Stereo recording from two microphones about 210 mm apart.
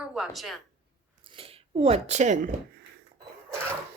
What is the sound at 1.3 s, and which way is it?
Speech, 25° right (ahead or behind).